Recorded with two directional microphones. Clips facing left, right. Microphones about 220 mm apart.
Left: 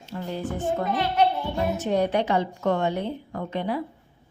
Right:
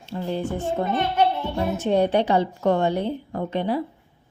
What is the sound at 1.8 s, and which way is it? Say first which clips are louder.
A woman's voice: right 5 dB; 30° right (ahead or behind).